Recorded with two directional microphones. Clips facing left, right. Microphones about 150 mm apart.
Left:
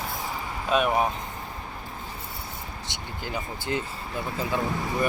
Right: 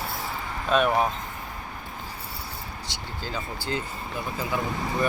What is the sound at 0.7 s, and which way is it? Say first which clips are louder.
Speech: right 1 dB; 5° left (ahead or behind).